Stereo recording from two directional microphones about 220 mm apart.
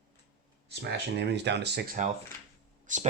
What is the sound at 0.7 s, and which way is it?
Speech, 50° right (ahead or behind).